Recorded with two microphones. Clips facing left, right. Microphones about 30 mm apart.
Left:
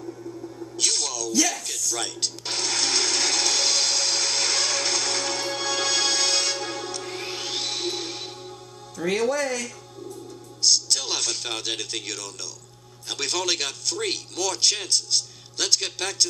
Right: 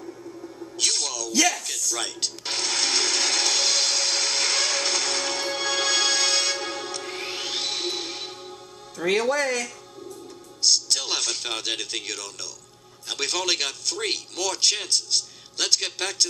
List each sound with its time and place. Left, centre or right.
0.0 s music: centre
9.0 s speech: right
10.6 s a man's voice: centre